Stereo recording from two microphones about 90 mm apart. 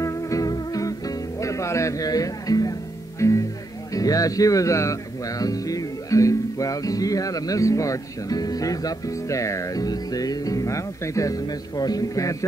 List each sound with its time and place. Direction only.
0.0 s music: 40° left (ahead or behind)
3.2 s speech: 35° left (ahead or behind)
3.9 s music: 40° left (ahead or behind)